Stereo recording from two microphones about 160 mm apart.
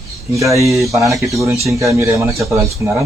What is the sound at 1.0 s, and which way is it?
Speech, 20° right (ahead or behind).